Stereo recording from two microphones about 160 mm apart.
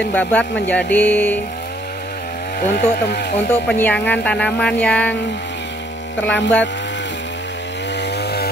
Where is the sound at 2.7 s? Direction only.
80° left.